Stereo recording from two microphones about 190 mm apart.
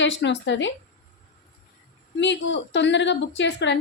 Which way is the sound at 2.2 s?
70° left (ahead or behind).